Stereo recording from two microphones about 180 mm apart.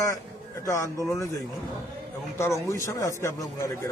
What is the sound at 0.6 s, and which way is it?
Speech, 15° left (ahead or behind).